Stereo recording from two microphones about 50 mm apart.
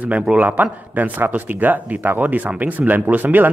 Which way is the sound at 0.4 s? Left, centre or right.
Right.